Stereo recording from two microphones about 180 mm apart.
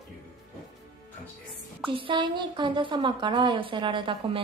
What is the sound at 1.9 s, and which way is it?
Speech, 30° right (ahead or behind).